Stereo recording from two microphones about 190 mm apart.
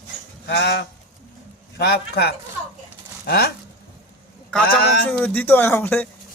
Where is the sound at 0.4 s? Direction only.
65° left (ahead or behind).